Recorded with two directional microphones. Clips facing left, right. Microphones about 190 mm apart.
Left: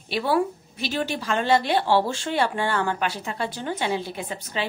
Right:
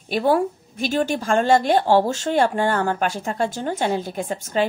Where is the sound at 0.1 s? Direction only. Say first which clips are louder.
Right 4 dB; 45° right (ahead or behind).